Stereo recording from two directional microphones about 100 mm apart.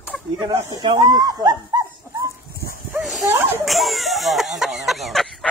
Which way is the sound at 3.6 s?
Centre (ahead or behind).